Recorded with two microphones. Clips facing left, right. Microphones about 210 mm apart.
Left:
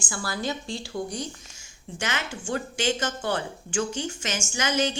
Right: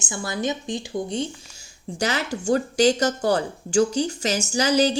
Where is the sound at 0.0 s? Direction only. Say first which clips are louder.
Right 4 dB; 20° right (ahead or behind).